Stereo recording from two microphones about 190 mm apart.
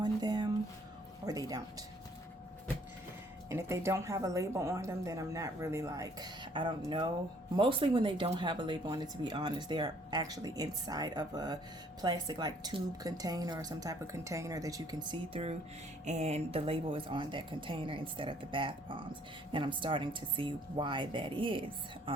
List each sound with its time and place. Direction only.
0.0 s a sound: 20° right (ahead or behind)
1.2 s speech: 20° right (ahead or behind)
3.5 s speech: 15° right (ahead or behind)